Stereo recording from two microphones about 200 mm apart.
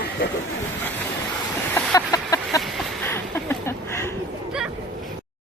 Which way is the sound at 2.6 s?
Centre (ahead or behind).